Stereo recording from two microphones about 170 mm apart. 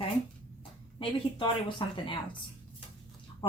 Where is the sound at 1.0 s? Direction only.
30° left (ahead or behind).